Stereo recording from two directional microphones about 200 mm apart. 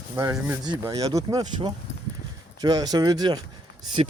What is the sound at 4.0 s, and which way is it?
Speech, 30° right (ahead or behind).